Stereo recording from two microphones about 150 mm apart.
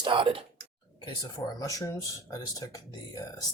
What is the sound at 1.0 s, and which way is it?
Speech, 30° left (ahead or behind).